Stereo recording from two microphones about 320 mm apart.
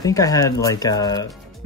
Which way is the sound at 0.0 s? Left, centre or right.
Centre.